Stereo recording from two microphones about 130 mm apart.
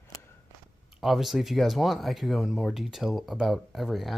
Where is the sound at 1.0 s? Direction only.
Centre (ahead or behind).